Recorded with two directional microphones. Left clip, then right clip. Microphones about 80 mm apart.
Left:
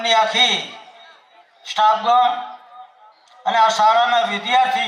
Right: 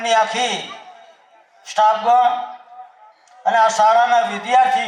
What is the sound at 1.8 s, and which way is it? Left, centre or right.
Speech, left.